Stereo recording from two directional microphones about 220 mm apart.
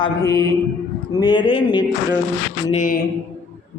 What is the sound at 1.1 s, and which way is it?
Speech, 20° left (ahead or behind).